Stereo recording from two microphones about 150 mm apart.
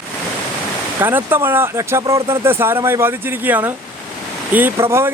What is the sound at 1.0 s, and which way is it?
Speech, 15° right (ahead or behind).